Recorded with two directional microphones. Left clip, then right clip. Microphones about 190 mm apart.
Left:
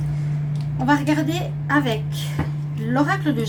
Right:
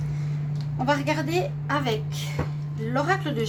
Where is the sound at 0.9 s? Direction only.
55° right (ahead or behind).